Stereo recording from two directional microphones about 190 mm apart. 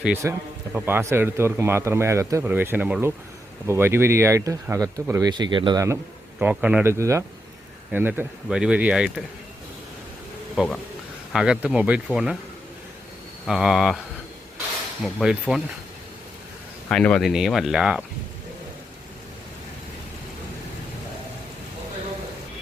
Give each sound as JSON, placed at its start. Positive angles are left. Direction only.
{"t": 0.0, "sound": "a man's voice", "side_deg": -10}
{"t": 6.4, "sound": "a man's voice", "side_deg": -5}
{"t": 10.5, "sound": "speech", "side_deg": 0}
{"t": 13.5, "sound": "speech", "side_deg": -5}
{"t": 15.0, "sound": "speech", "side_deg": -5}
{"t": 16.9, "sound": "speech", "side_deg": 5}